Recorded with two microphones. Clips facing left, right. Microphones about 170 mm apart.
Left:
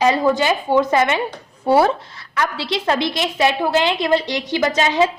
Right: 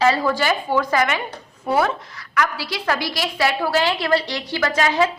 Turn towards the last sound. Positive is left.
turn(degrees=20)  # may be behind; listen again after turning